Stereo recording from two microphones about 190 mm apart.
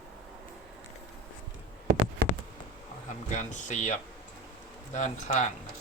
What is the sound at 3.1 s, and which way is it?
Speech, 40° left (ahead or behind).